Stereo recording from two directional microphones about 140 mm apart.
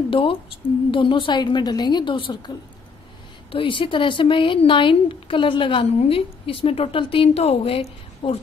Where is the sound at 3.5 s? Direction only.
40° left (ahead or behind).